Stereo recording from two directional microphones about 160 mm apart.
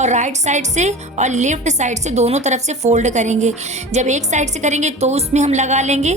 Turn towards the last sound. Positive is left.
turn(degrees=-45)  # may be behind; listen again after turning